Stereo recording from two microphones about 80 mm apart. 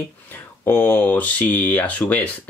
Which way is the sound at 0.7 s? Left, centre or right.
Left.